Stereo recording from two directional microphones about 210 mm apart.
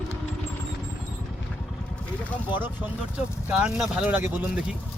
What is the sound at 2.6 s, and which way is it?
Speech, 5° right (ahead or behind).